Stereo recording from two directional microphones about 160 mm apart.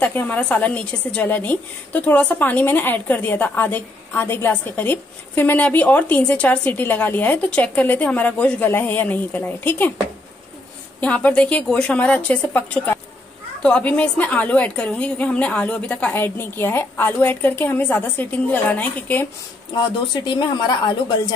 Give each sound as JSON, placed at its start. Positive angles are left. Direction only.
{"t": 0.0, "sound": "a woman's voice", "side_deg": 10}
{"t": 11.0, "sound": "a woman's voice", "side_deg": 10}
{"t": 20.3, "sound": "a woman's voice", "side_deg": 25}